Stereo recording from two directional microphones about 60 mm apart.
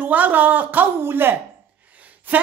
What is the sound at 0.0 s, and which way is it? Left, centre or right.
Speech, right.